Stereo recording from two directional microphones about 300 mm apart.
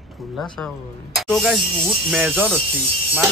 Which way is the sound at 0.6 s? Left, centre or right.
Centre.